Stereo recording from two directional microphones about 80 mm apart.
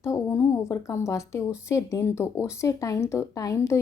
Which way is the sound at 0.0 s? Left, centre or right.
Left.